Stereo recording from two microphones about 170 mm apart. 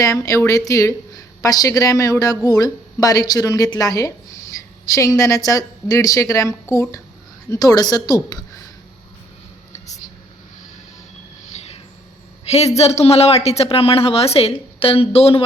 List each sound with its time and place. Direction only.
0.0 s speech: 20° left (ahead or behind)
11.5 s a sound: 40° left (ahead or behind)
12.5 s a woman's voice: 40° left (ahead or behind)